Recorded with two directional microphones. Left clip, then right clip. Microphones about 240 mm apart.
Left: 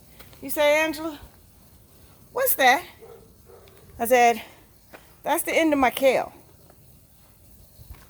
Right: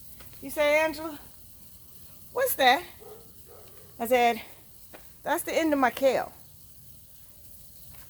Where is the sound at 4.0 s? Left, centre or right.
Left.